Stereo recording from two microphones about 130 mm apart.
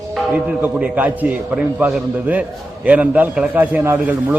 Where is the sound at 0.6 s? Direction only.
10° right (ahead or behind).